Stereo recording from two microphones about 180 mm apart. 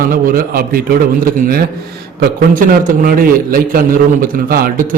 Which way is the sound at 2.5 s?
50° right (ahead or behind).